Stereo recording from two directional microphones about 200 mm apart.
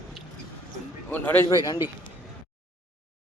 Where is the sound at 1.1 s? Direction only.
10° left (ahead or behind).